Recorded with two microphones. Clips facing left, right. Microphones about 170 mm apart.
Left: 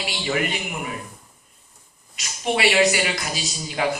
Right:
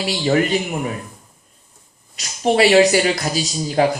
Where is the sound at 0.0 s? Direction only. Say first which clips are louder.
Right 7 dB; 40° right (ahead or behind).